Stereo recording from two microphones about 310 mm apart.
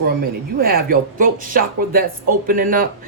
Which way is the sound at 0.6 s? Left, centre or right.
Right.